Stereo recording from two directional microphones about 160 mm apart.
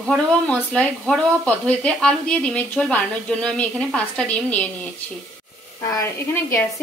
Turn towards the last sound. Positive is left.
turn(degrees=20)  # may be behind; listen again after turning